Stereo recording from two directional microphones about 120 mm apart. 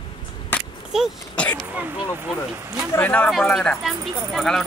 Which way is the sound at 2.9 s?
15° left (ahead or behind).